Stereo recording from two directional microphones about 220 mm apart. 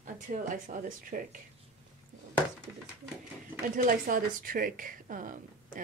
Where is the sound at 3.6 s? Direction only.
40° right (ahead or behind).